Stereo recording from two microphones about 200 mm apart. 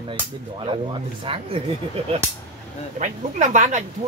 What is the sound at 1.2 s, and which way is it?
Speech, 25° right (ahead or behind).